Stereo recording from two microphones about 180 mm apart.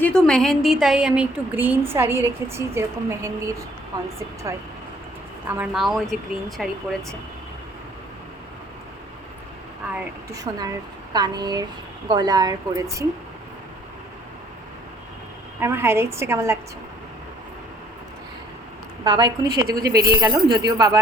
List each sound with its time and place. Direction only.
0.0 s a woman's voice: 5° left (ahead or behind); by 3.3 s 15° right (ahead or behind)
5.5 s speech: 5° right (ahead or behind)
10.3 s speech: 20° right (ahead or behind)
15.6 s a woman's voice: 15° right (ahead or behind)
19.0 s speech: 25° right (ahead or behind)